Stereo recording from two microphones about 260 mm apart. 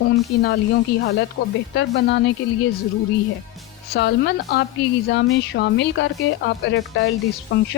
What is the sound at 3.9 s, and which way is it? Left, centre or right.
Speech, left.